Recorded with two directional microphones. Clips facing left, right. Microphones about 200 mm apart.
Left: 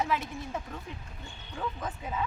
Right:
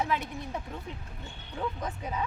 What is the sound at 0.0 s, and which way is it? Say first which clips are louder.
Speech: even; 5° left (ahead or behind).